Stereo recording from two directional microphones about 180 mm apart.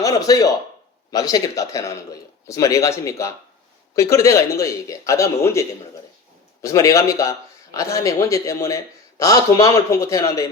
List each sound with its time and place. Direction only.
0.0 s a man's voice: 20° left (ahead or behind)